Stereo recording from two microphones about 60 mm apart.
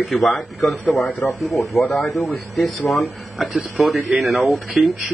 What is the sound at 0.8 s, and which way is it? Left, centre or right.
A man's voice, left.